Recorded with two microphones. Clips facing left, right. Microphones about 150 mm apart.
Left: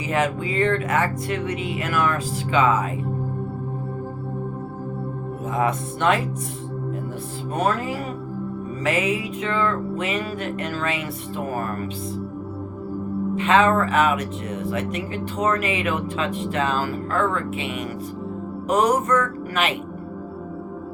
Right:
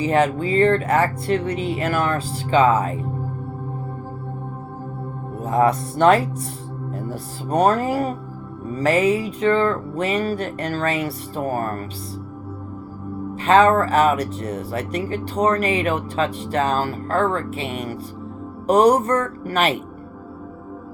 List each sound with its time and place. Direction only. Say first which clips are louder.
0.0 s speech: right 5 dB; 35° right (ahead or behind)
5.5 s speech: right 5 dB; 35° right (ahead or behind)
13.3 s speech: right 4 dB; 35° right (ahead or behind)